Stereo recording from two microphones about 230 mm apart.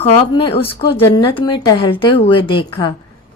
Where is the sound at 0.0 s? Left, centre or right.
Left.